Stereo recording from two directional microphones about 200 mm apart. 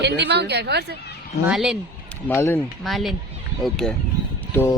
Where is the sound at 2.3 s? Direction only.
10° left (ahead or behind).